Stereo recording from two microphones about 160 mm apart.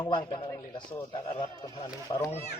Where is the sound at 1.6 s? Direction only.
25° left (ahead or behind).